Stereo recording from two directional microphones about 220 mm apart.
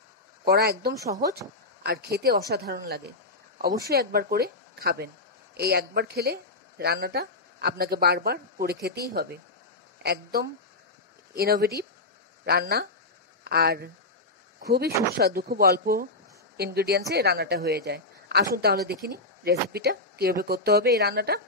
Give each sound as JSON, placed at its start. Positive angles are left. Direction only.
{"t": 0.5, "sound": "a woman's voice", "side_deg": -45}
{"t": 0.9, "sound": "speech", "side_deg": -15}
{"t": 1.8, "sound": "a woman's voice", "side_deg": -45}